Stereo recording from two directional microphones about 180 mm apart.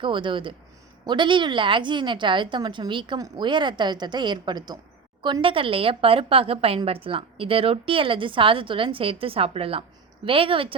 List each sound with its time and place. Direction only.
0.0 s a woman's voice: 25° right (ahead or behind)